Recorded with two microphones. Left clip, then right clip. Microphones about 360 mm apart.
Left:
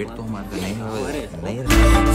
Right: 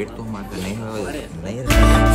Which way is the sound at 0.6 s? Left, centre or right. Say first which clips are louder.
Even; left.